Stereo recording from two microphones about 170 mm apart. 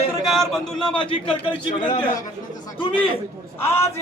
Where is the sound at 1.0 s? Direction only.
30° left (ahead or behind).